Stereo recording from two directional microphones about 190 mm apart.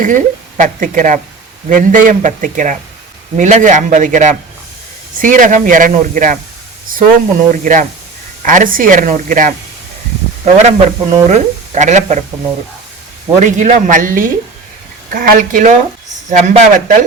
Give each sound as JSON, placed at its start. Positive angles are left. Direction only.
{"t": 0.0, "sound": "a man's voice", "side_deg": -45}
{"t": 13.4, "sound": "speech", "side_deg": -40}